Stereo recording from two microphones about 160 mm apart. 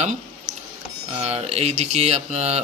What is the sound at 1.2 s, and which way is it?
Speech, 40° right (ahead or behind).